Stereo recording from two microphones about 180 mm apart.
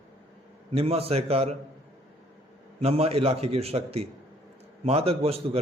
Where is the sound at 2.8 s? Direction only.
35° right (ahead or behind).